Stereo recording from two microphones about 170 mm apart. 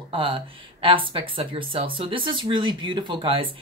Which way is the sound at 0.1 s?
30° right (ahead or behind).